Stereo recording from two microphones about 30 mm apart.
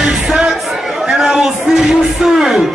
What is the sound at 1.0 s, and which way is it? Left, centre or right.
Speech, centre.